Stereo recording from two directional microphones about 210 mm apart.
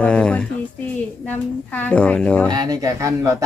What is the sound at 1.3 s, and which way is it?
Speech, 10° left (ahead or behind).